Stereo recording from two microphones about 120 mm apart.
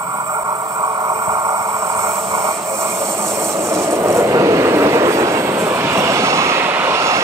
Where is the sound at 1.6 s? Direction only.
55° right (ahead or behind).